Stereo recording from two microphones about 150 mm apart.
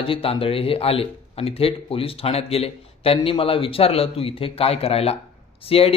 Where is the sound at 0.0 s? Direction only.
40° left (ahead or behind).